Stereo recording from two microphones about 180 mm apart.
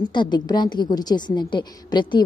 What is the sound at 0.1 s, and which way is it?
A woman's voice, 25° left (ahead or behind).